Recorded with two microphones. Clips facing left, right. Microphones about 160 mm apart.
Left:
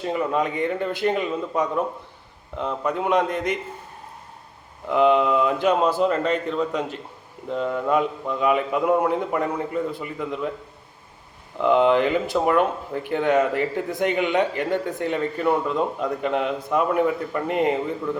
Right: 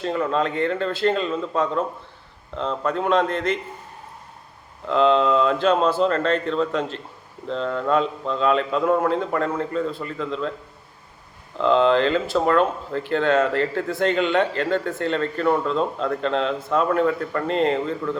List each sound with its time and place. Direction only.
0.0 s speech: 15° left (ahead or behind)
4.9 s speech: 15° left (ahead or behind)
11.5 s speech: 15° left (ahead or behind)